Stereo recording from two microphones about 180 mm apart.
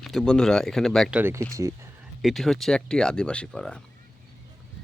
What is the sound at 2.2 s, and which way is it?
Speech, centre (ahead or behind).